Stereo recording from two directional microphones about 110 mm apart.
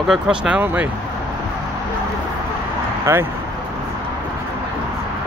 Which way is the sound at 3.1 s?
25° right (ahead or behind).